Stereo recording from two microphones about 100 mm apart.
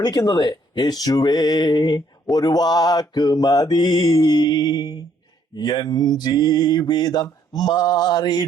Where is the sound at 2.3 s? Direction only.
45° left (ahead or behind).